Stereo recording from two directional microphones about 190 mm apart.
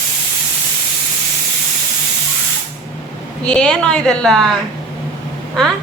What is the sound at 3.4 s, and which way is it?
A woman's voice, 5° left (ahead or behind).